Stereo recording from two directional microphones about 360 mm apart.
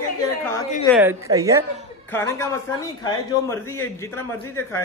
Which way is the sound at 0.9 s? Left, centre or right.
Centre.